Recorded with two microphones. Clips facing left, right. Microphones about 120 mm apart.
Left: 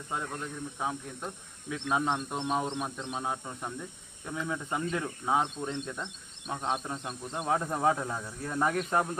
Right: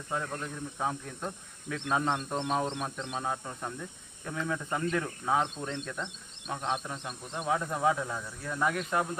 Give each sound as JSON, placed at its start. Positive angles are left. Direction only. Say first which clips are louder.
{"t": 0.1, "sound": "a man's voice", "louder": "right 1 dB", "side_deg": 10}
{"t": 6.9, "sound": "speech", "louder": "left 2 dB", "side_deg": 30}